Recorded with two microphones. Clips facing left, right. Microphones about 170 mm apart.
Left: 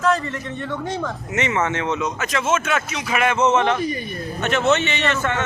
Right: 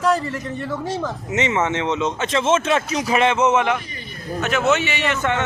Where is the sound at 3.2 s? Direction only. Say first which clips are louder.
Left 1 dB; 20° right (ahead or behind).